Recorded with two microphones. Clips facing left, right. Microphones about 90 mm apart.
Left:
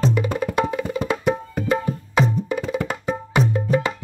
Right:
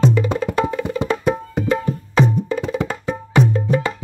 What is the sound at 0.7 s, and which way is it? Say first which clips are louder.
Music: right 2 dB; 20° left (ahead or behind).